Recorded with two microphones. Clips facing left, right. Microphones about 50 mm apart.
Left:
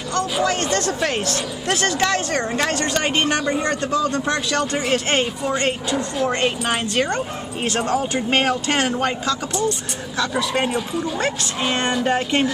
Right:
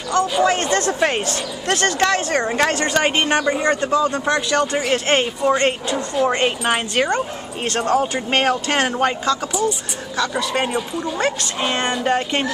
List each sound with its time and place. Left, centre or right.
0.1 s speech: centre
1.3 s speech: centre
7.6 s speech: centre
10.1 s speech: centre